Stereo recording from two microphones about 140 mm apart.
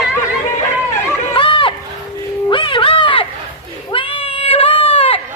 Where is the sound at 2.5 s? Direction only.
35° left (ahead or behind).